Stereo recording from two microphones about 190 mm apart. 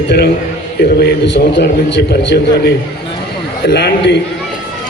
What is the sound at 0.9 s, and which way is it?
A man's voice, 60° left (ahead or behind).